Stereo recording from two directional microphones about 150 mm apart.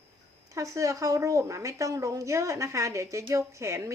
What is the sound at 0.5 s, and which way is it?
A woman's voice, 20° right (ahead or behind).